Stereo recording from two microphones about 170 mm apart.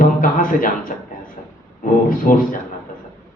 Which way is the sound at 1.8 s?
50° left (ahead or behind).